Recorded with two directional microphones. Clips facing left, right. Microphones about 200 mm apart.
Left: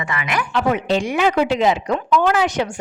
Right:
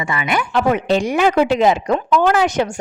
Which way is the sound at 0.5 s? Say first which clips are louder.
Right 2 dB; 50° right (ahead or behind).